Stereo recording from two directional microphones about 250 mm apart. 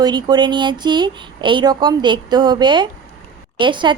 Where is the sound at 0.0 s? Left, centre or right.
Centre.